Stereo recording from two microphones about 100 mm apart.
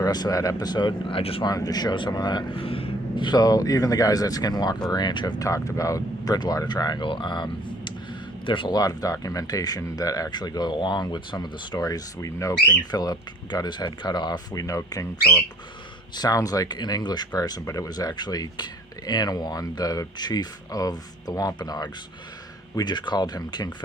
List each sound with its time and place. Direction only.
0.0 s speech: 40° left (ahead or behind); by 1.5 s 65° left (ahead or behind)
1.5 s speech: 40° left (ahead or behind)
2.6 s a sound: 70° left (ahead or behind)
3.2 s speech: 45° left (ahead or behind)
8.8 s speech: 40° left (ahead or behind)
12.9 s speech: 45° left (ahead or behind)
16.1 s speech: 40° left (ahead or behind)